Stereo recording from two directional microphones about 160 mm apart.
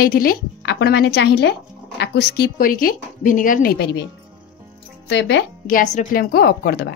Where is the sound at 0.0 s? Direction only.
65° left (ahead or behind); by 4.0 s 90° left.